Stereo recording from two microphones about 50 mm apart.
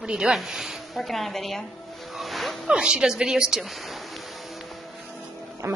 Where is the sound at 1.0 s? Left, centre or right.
Centre.